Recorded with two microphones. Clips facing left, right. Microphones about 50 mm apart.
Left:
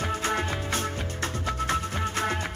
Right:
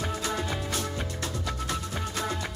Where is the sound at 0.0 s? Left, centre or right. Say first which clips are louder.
Left 3 dB; left.